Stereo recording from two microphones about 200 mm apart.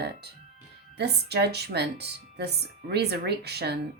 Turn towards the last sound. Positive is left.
turn(degrees=-55)  # may be behind; listen again after turning